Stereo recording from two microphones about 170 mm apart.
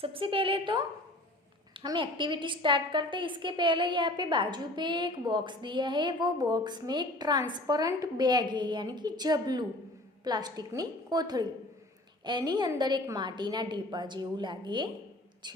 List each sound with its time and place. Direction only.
0.0 s a woman's voice: 30° right (ahead or behind)